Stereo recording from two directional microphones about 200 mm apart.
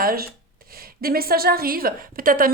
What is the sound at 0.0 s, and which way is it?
A woman's voice, 45° right (ahead or behind).